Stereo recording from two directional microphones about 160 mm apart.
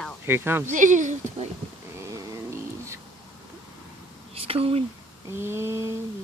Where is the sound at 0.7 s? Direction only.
50° right (ahead or behind).